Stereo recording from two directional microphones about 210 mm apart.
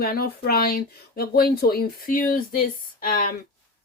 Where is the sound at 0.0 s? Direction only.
45° left (ahead or behind).